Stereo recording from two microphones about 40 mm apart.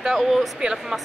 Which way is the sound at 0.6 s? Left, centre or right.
Right.